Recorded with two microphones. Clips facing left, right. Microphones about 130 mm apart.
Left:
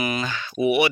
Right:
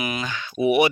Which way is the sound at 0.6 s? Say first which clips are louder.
Right 2 dB; 45° right (ahead or behind).